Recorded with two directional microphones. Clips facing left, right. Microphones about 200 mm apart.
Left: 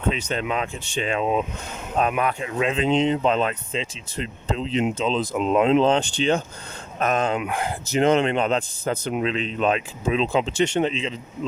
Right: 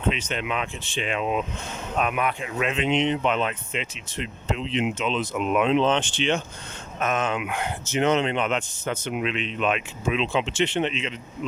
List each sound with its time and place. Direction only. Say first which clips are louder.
0.3 s speech: left 3 dB; 35° left (ahead or behind)
8.4 s speech: left 3 dB; 35° left (ahead or behind)